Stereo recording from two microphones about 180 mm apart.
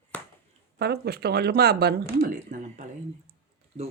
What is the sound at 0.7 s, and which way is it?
Speech, 65° right (ahead or behind).